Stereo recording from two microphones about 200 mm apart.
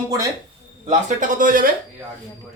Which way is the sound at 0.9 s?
40° right (ahead or behind).